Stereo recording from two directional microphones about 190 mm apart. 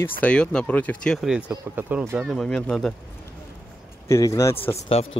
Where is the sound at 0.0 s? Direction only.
5° left (ahead or behind).